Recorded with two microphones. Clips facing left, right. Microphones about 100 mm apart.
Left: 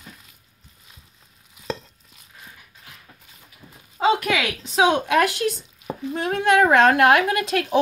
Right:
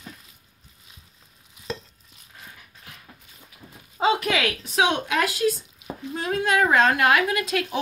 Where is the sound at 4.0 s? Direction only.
5° right (ahead or behind).